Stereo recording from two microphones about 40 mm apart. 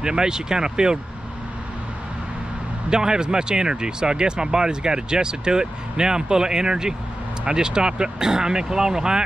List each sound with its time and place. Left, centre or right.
0.0 s speech: centre
2.9 s speech: centre